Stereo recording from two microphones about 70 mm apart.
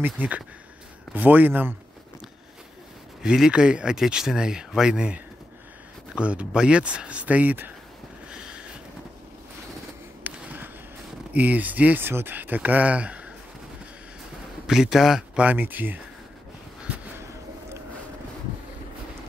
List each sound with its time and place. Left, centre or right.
0.0 s speech: right
3.2 s speech: centre; by 7.7 s right
8.3 s a sound: centre
10.2 s a sound: right
11.3 s speech: right
14.7 s speech: centre
15.4 s speech: right